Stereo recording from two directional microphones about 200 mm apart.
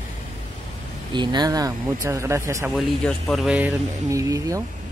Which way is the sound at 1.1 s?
20° right (ahead or behind).